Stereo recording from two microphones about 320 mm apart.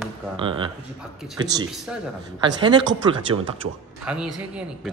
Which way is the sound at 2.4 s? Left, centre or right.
Centre.